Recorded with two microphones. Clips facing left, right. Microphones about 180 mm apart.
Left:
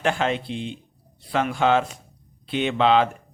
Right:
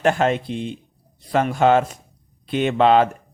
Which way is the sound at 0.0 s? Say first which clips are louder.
Right 5 dB; 45° right (ahead or behind).